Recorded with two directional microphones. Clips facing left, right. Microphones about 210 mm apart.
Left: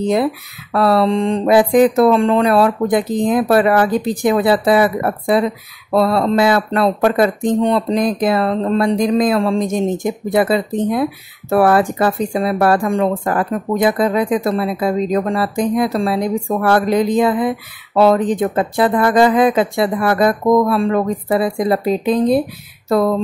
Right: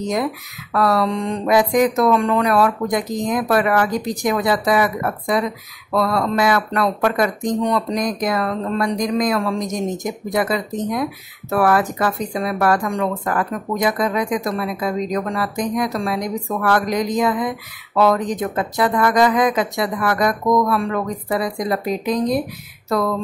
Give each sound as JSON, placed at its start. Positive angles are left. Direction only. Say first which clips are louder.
{"t": 0.0, "sound": "speech", "louder": "left 6 dB", "side_deg": 30}